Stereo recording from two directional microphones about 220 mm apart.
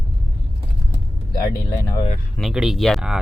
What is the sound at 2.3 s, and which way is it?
Speech, centre (ahead or behind).